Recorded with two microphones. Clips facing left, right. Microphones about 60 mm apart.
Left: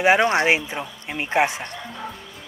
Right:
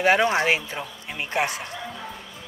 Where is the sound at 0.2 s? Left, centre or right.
Centre.